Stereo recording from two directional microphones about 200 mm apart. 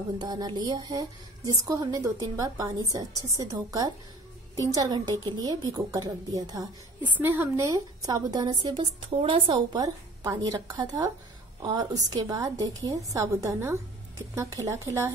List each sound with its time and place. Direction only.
0.2 s a woman's voice: 20° right (ahead or behind)